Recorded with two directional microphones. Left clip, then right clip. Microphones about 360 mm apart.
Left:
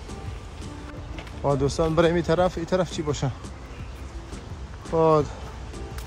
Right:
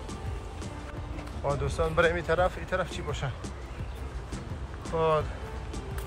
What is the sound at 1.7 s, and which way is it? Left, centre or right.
Speech, centre.